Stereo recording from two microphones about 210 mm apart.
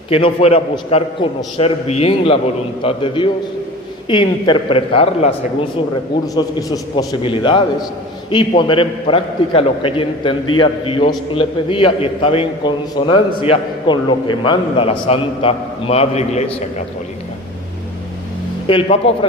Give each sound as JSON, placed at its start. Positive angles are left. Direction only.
{"t": 0.1, "sound": "a man's voice", "side_deg": 30}
{"t": 6.3, "sound": "a man's voice", "side_deg": 20}
{"t": 18.7, "sound": "a man's voice", "side_deg": 25}